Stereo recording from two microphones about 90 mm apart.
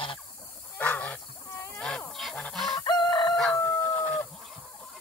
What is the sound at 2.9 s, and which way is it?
Chicken, 55° left (ahead or behind).